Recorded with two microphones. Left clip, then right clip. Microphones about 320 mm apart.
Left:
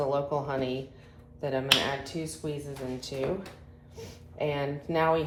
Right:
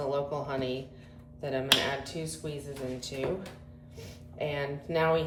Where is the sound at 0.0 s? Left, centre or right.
Centre.